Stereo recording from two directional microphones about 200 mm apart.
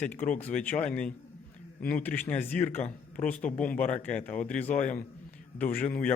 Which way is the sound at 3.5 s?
5° left (ahead or behind).